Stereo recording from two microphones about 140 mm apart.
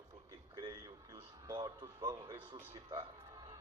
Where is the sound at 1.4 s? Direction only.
30° right (ahead or behind).